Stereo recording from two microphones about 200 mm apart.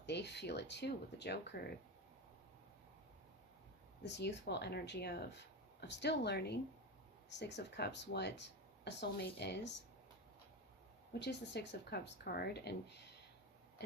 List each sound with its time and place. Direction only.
0.0 s speech: 60° left (ahead or behind)
4.0 s speech: 60° left (ahead or behind)
11.1 s speech: 60° left (ahead or behind)